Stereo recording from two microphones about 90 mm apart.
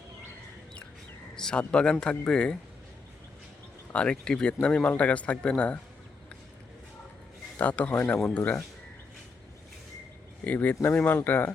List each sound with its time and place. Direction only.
1.4 s speech: 10° left (ahead or behind)
3.9 s speech: 10° left (ahead or behind)
7.6 s speech: 15° left (ahead or behind)
10.4 s speech: 15° left (ahead or behind)